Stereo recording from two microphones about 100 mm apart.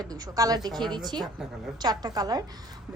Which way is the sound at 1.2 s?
5° right (ahead or behind).